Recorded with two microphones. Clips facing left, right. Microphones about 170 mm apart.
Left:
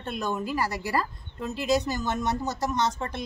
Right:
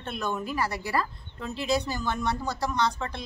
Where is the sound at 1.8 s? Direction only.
20° left (ahead or behind).